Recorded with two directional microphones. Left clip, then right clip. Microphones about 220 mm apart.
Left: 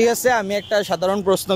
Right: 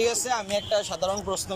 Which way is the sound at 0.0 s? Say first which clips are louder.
Left 9 dB; 35° left (ahead or behind).